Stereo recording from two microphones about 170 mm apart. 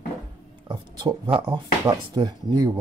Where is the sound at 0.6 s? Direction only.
30° right (ahead or behind).